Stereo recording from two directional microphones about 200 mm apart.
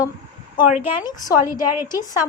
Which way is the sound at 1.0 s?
20° left (ahead or behind).